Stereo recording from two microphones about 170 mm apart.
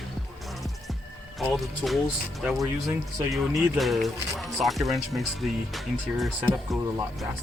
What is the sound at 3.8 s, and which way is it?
Speech, centre (ahead or behind).